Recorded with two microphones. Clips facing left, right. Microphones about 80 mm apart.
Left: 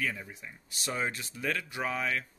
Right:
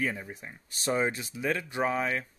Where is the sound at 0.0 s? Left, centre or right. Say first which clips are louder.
Right 3 dB; right.